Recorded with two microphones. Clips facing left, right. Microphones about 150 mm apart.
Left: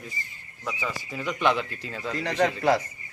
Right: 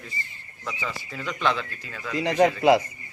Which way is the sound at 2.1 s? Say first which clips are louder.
Right 5 dB; 15° right (ahead or behind).